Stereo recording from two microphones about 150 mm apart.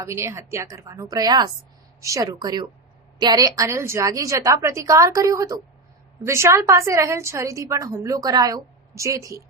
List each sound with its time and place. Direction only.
0.0 s a woman's voice: 20° right (ahead or behind)